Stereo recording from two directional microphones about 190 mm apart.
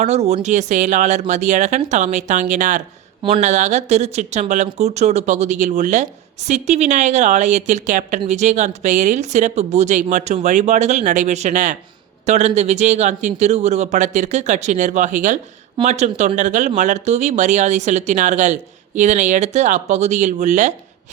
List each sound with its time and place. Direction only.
0.0 s speech: 35° right (ahead or behind)